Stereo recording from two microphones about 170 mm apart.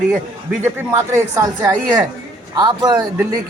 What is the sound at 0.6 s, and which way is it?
Speech, 15° right (ahead or behind).